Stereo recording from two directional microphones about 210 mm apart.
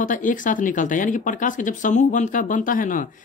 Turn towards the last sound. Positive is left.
turn(degrees=40)  # may be behind; listen again after turning